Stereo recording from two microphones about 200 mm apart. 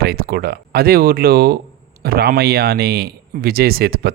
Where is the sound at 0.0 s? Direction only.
50° right (ahead or behind).